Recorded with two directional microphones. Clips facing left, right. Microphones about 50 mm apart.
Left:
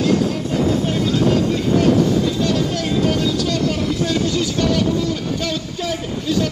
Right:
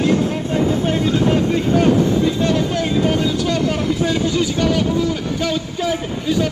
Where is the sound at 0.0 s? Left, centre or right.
Right.